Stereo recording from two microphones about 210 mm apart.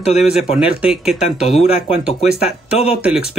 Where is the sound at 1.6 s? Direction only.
25° left (ahead or behind).